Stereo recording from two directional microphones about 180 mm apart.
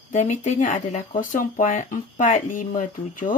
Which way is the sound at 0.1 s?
45° left (ahead or behind).